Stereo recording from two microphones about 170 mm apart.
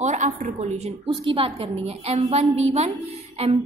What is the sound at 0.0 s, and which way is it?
A woman's voice, 45° right (ahead or behind).